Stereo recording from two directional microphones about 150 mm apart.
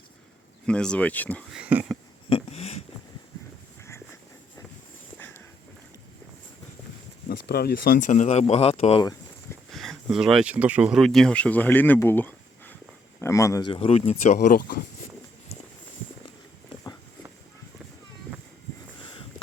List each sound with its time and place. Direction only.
0.6 s speech: 5° left (ahead or behind)
1.5 s speech: 5° right (ahead or behind)
2.3 s a sound: 45° left (ahead or behind)
3.8 s a sound: 20° left (ahead or behind)
7.3 s speech: 90° left; by 9.0 s 40° left (ahead or behind)
9.7 s speech: centre (ahead or behind); by 13.7 s 20° left (ahead or behind)
13.7 s speech: 40° left (ahead or behind); by 14.8 s 65° left (ahead or behind)